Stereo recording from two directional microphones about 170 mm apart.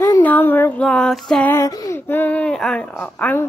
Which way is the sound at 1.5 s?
20° left (ahead or behind).